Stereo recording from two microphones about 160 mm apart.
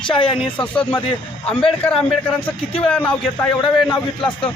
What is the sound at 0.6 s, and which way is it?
Speech, 5° left (ahead or behind).